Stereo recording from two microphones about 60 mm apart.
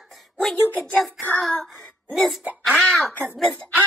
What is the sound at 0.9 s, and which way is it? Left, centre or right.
Child singing, centre.